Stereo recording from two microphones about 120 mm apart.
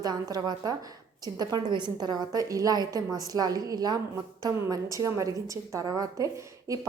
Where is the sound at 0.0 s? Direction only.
35° right (ahead or behind).